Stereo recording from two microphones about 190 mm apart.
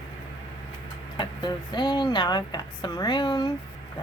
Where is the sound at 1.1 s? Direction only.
25° left (ahead or behind).